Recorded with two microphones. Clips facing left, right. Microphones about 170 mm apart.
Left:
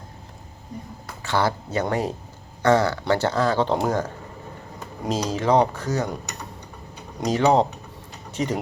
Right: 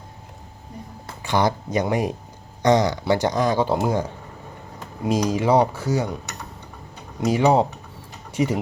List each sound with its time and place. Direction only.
1.2 s speech: 15° right (ahead or behind)
7.3 s speech: 10° right (ahead or behind)
8.3 s a sound: 10° right (ahead or behind)